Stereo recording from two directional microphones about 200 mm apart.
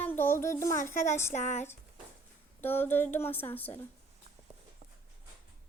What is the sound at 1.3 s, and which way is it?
Speech, 35° left (ahead or behind).